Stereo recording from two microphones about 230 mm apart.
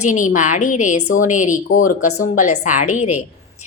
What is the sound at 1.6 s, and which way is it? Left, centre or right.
Speech, left.